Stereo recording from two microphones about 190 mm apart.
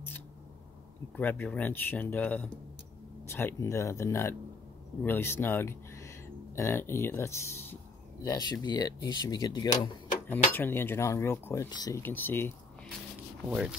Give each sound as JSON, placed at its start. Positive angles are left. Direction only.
{"t": 1.1, "sound": "speech", "side_deg": 10}
{"t": 13.5, "sound": "speech", "side_deg": -5}